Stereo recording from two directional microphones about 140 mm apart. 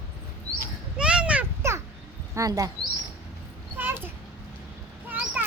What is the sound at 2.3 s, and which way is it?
Speech, 25° right (ahead or behind).